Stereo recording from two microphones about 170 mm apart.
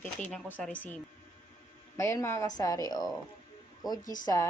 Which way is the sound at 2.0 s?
15° left (ahead or behind).